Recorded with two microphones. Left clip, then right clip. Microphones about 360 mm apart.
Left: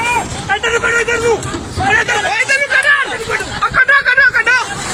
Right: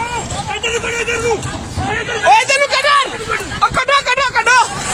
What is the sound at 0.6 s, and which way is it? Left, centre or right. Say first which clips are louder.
Speech: left 5 dB; centre.